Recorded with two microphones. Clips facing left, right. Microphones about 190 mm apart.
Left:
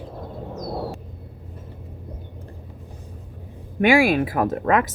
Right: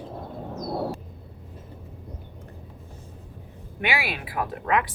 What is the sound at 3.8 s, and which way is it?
Speech, 45° left (ahead or behind).